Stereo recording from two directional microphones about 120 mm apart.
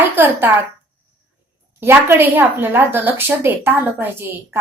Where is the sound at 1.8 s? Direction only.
20° right (ahead or behind).